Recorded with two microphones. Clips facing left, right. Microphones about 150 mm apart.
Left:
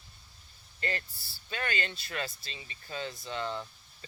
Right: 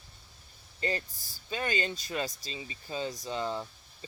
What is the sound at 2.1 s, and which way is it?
Speech, 20° right (ahead or behind).